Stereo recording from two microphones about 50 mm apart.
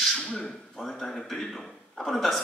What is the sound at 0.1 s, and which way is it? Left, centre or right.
A man's voice, centre.